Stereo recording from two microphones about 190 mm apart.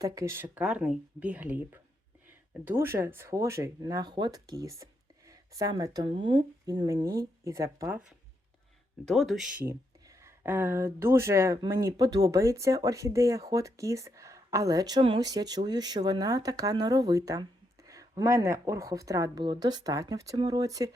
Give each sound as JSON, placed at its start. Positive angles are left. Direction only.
{"t": 0.0, "sound": "speech", "side_deg": -15}
{"t": 9.0, "sound": "speech", "side_deg": 0}
{"t": 9.6, "sound": "speech", "side_deg": -15}